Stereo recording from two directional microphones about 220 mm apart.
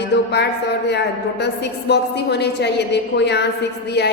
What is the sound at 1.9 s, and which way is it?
A woman's voice, 50° left (ahead or behind).